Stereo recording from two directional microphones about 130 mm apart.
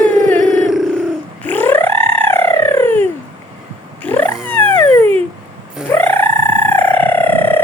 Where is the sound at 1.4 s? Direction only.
15° left (ahead or behind).